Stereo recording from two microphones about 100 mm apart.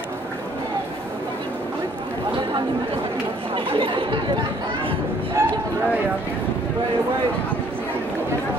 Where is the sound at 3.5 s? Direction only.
60° right (ahead or behind).